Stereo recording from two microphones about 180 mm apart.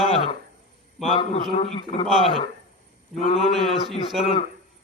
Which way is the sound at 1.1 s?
30° left (ahead or behind).